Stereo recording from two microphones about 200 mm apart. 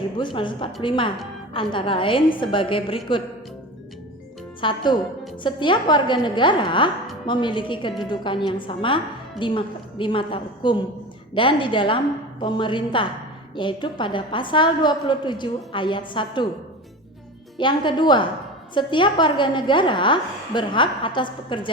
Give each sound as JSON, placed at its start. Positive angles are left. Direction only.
{"t": 0.2, "sound": "a woman's voice", "side_deg": 25}
{"t": 4.6, "sound": "a woman's voice", "side_deg": 20}
{"t": 17.6, "sound": "a woman's voice", "side_deg": 25}